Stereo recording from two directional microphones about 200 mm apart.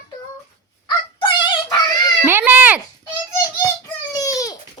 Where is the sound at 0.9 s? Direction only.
25° left (ahead or behind).